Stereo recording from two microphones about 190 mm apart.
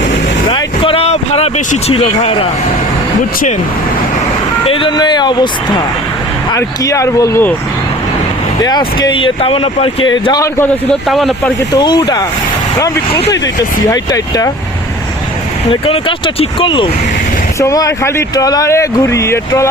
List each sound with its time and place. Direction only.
0.5 s speech: 30° left (ahead or behind)
4.6 s speech: 30° left (ahead or behind)
6.5 s speech: 15° left (ahead or behind)
8.6 s speech: 20° left (ahead or behind)
10.2 s speech: 20° left (ahead or behind)
10.8 s speech: centre (ahead or behind)
11.7 s speech: 20° left (ahead or behind)
13.9 s speech: 20° left (ahead or behind)
15.7 s speech: 25° left (ahead or behind)